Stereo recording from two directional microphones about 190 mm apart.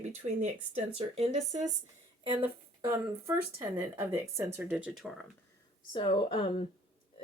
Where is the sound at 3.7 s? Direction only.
15° right (ahead or behind).